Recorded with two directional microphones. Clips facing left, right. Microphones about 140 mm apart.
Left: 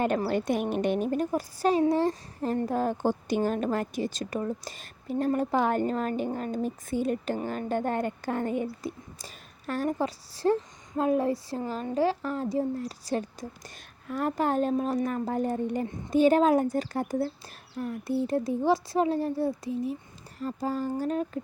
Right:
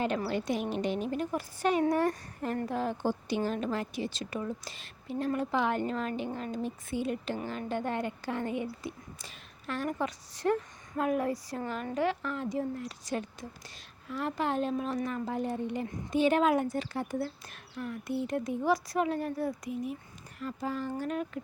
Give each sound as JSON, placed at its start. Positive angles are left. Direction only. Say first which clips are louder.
{"t": 0.3, "sound": "a woman's voice", "louder": "left 4 dB", "side_deg": 50}
{"t": 14.1, "sound": "a woman's voice", "louder": "left 5 dB", "side_deg": 45}